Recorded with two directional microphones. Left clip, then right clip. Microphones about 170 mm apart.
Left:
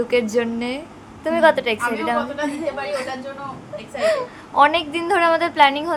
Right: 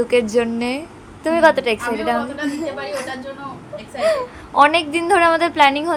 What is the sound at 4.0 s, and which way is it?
A woman's voice, 10° right (ahead or behind).